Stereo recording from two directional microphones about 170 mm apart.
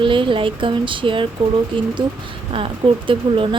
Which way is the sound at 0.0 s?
30° right (ahead or behind).